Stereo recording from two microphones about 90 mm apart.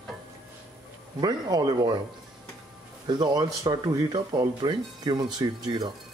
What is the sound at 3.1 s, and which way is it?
Speech, 50° right (ahead or behind).